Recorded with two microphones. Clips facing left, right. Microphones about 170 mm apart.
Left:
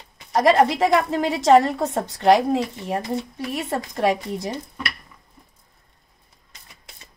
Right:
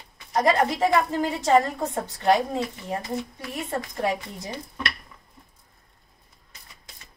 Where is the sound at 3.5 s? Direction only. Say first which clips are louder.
Left 4 dB; 75° left (ahead or behind).